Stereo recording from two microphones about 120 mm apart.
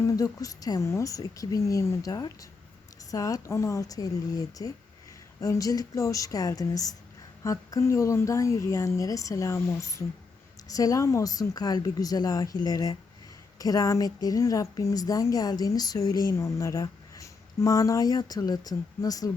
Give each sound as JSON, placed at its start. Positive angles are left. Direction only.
{"t": 0.0, "sound": "a woman's voice", "side_deg": 30}